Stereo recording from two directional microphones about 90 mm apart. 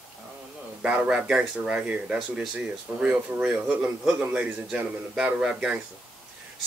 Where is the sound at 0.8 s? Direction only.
10° right (ahead or behind).